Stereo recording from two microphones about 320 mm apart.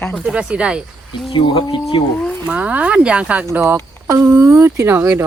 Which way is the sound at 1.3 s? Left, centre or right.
Centre.